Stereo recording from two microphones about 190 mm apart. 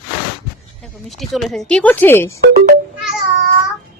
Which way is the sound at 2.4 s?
55° right (ahead or behind).